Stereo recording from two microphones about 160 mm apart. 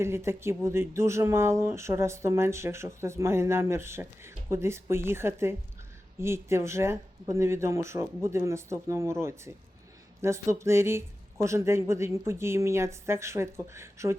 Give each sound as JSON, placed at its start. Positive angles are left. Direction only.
{"t": 0.0, "sound": "speech", "side_deg": -15}